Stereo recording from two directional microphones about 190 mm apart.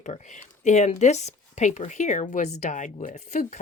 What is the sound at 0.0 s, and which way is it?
Speech, 40° left (ahead or behind).